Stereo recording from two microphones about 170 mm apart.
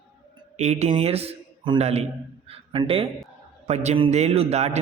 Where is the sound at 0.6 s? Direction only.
40° right (ahead or behind).